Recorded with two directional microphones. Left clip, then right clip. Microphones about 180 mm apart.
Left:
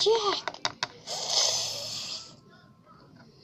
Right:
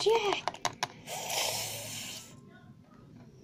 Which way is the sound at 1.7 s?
Centre (ahead or behind).